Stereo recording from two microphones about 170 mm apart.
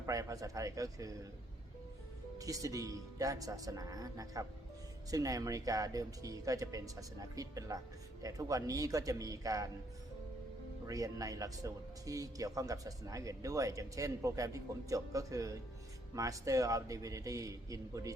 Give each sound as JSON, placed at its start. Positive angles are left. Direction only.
{"t": 0.0, "sound": "speech", "side_deg": -20}
{"t": 2.4, "sound": "speech", "side_deg": -20}
{"t": 10.8, "sound": "speech", "side_deg": -20}